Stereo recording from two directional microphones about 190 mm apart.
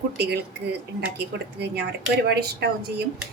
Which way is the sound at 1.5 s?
60° right (ahead or behind).